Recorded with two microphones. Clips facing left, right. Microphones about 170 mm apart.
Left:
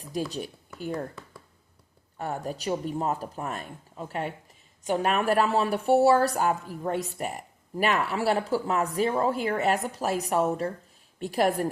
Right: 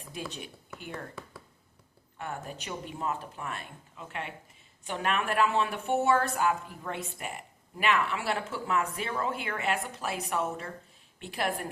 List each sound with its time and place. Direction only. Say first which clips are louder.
0.3 s speech: left 6 dB; 40° left (ahead or behind)
2.1 s speech: left 6 dB; 40° left (ahead or behind)